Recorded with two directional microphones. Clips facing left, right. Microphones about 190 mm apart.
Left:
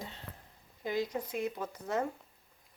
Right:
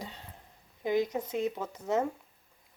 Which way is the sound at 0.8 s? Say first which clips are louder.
Right 5 dB; 20° right (ahead or behind).